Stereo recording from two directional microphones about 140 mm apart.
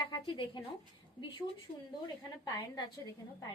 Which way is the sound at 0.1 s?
35° left (ahead or behind).